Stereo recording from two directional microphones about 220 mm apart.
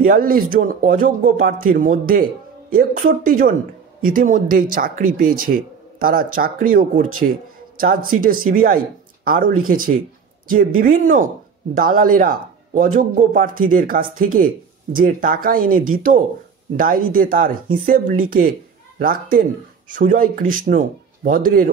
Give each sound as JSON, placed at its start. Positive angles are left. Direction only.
{"t": 0.0, "sound": "speech", "side_deg": -40}